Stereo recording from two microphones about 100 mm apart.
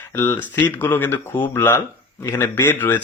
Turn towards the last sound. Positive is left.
turn(degrees=20)  # may be behind; listen again after turning